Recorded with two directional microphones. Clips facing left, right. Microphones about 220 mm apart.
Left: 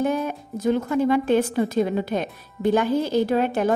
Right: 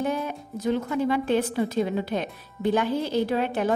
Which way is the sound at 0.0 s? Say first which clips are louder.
Left 4 dB; 45° left (ahead or behind).